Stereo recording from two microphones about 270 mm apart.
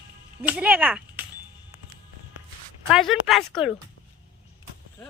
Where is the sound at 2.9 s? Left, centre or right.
Centre.